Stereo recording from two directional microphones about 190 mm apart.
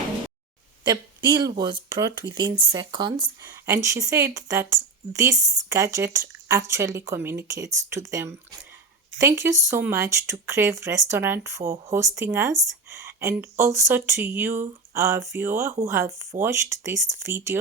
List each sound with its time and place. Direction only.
0.9 s speech: 25° right (ahead or behind)